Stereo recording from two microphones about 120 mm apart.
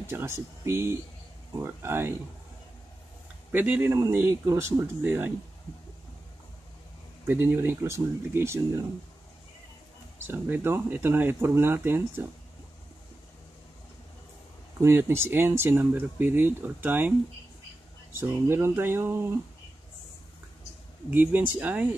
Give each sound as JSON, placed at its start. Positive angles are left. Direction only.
{"t": 0.0, "sound": "speech", "side_deg": -20}
{"t": 3.5, "sound": "speech", "side_deg": -15}
{"t": 7.2, "sound": "speech", "side_deg": -15}
{"t": 10.2, "sound": "speech", "side_deg": -15}
{"t": 14.8, "sound": "speech", "side_deg": -20}
{"t": 18.5, "sound": "speech", "side_deg": -20}
{"t": 21.1, "sound": "speech", "side_deg": -15}